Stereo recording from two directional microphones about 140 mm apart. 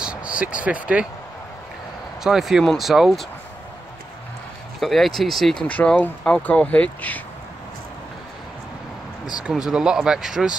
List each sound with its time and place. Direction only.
0.0 s a sound: 10° right (ahead or behind)
0.6 s speech: 10° right (ahead or behind)
2.2 s speech: 5° right (ahead or behind)
4.7 s speech: centre (ahead or behind)
9.4 s speech: 5° right (ahead or behind)